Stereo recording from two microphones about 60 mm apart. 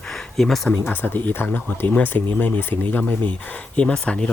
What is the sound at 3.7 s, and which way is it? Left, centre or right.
Speech, centre.